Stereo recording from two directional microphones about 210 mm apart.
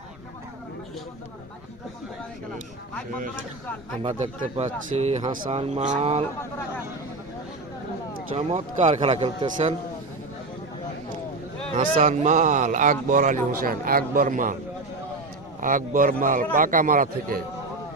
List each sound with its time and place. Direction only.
4.0 s speech: 30° right (ahead or behind)
8.4 s a man's voice: 30° right (ahead or behind)
11.8 s speech: 40° right (ahead or behind)
15.6 s speech: 40° right (ahead or behind)